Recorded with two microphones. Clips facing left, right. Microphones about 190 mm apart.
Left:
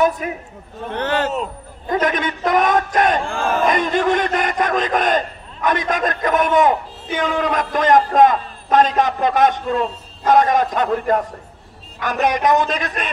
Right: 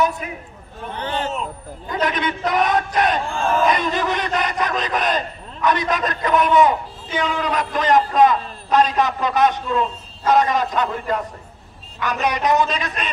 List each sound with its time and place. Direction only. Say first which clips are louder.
0.9 s a man's voice: left 5 dB; 75° left (ahead or behind)
1.9 s a man's voice: left 3 dB; 50° left (ahead or behind)